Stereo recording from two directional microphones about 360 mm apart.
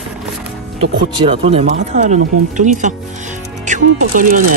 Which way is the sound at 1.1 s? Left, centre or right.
Centre.